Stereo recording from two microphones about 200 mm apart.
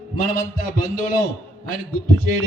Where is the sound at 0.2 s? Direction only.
45° left (ahead or behind).